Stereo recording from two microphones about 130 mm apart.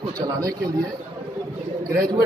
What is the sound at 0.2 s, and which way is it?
Speech, 30° right (ahead or behind).